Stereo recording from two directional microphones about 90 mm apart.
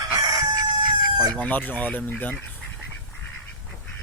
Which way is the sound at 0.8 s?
50° right (ahead or behind).